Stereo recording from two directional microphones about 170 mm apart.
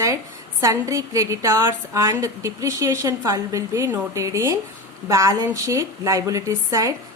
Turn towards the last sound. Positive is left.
turn(degrees=-20)  # may be behind; listen again after turning